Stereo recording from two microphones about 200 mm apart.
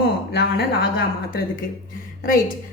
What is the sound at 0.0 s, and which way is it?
Speech, 55° left (ahead or behind).